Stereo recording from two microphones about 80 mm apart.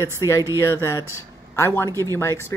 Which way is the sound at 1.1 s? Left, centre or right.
Left.